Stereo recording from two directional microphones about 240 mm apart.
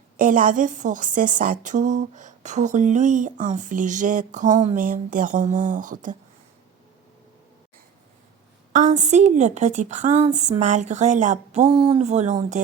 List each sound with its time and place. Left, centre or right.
0.2 s a woman's voice: right
8.7 s a woman's voice: right